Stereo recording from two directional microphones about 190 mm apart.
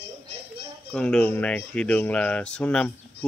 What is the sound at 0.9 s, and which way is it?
Speech, 5° left (ahead or behind).